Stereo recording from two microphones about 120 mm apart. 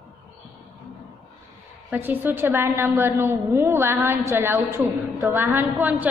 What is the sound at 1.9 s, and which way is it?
A woman's voice, 15° right (ahead or behind).